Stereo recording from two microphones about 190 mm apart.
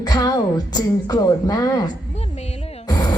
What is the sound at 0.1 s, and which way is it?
A woman's voice, 20° left (ahead or behind).